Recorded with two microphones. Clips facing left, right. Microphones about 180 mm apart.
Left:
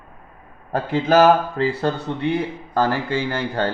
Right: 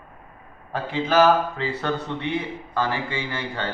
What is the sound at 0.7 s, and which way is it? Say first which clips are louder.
Speech: left 4 dB; 40° left (ahead or behind).